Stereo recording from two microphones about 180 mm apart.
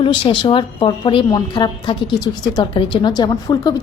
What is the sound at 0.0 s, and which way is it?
A woman's voice, 30° left (ahead or behind).